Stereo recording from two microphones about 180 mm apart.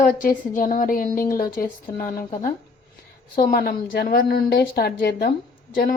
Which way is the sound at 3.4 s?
55° left (ahead or behind).